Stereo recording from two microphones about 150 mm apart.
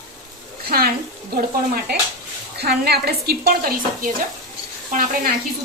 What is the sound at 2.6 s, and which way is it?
A woman's voice, 90° right.